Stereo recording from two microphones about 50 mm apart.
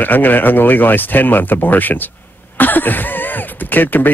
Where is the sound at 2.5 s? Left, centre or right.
Left.